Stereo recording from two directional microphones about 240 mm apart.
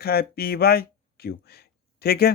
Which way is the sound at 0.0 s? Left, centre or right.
Left.